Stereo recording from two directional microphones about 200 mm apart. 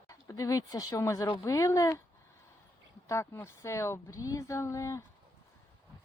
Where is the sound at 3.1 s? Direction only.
15° left (ahead or behind).